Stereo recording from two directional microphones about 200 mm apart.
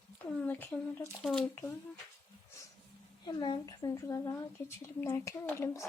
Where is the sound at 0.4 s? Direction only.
10° left (ahead or behind).